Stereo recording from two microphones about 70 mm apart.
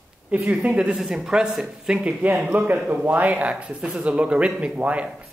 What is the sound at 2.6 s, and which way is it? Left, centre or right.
A man's voice, right.